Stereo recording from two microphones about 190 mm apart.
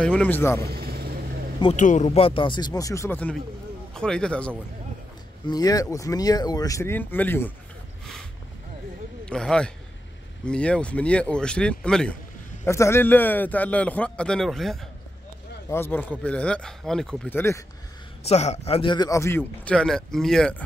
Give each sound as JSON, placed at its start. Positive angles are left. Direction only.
{"t": 0.0, "sound": "a man's voice", "side_deg": 5}
{"t": 0.7, "sound": "vehicle", "side_deg": -55}
{"t": 1.8, "sound": "speech", "side_deg": 40}
{"t": 5.5, "sound": "a man's voice", "side_deg": 20}
{"t": 9.2, "sound": "a man's voice", "side_deg": 5}
{"t": 18.2, "sound": "a man's voice", "side_deg": 35}